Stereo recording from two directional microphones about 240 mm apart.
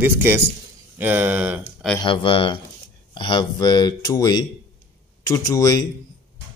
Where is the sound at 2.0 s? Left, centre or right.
Left.